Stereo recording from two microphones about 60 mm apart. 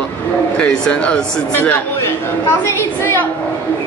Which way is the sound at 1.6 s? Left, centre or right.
Left.